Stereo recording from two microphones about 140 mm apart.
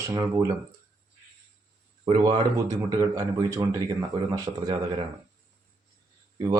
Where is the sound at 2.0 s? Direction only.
30° right (ahead or behind).